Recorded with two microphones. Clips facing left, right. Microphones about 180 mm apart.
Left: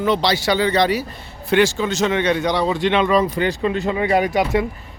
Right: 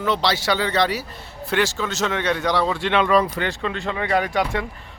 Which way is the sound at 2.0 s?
15° left (ahead or behind).